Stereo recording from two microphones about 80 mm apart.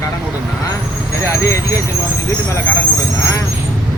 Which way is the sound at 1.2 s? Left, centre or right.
Left.